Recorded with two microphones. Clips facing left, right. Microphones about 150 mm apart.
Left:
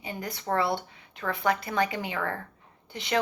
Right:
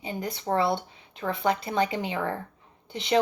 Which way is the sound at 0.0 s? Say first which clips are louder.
Right 3 dB; 25° right (ahead or behind).